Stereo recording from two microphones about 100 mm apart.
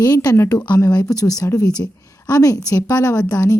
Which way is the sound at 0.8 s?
35° left (ahead or behind).